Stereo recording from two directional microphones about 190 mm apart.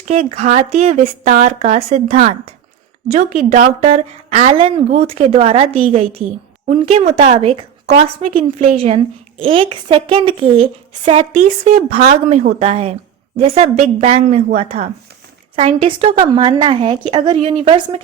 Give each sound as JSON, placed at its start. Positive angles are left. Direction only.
{"t": 0.0, "sound": "a woman's voice", "side_deg": -35}
{"t": 11.4, "sound": "a woman's voice", "side_deg": -35}